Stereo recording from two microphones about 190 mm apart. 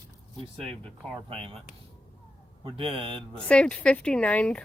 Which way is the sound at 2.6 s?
30° right (ahead or behind).